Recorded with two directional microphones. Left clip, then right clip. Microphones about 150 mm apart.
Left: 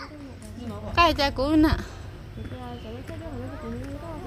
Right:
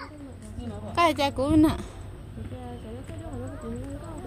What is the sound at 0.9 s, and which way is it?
Speech, 25° right (ahead or behind).